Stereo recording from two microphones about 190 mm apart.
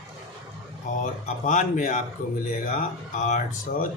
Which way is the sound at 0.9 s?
40° left (ahead or behind).